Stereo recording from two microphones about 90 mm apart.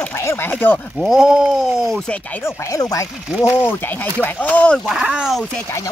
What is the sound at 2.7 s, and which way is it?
Speech, 35° left (ahead or behind).